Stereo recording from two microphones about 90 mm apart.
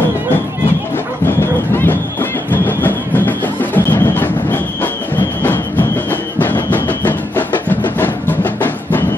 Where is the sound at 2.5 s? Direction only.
20° left (ahead or behind).